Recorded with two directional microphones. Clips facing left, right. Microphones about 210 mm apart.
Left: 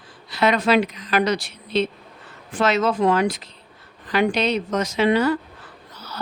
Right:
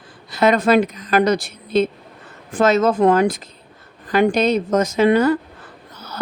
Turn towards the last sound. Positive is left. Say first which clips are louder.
# right 4 dB
turn(degrees=-50)  # may be behind; listen again after turning